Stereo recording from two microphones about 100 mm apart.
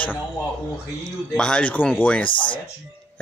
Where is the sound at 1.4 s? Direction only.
10° left (ahead or behind).